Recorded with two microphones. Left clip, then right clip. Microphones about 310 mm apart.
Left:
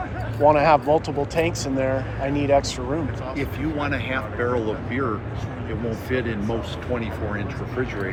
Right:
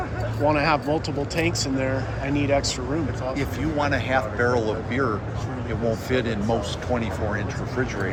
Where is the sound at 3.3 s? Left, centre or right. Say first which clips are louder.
Even; right.